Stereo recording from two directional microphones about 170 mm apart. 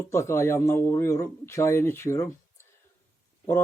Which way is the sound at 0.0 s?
15° left (ahead or behind).